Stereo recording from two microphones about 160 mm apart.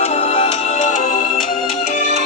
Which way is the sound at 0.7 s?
50° left (ahead or behind).